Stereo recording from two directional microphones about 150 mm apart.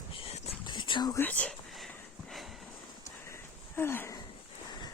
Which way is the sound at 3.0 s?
20° left (ahead or behind).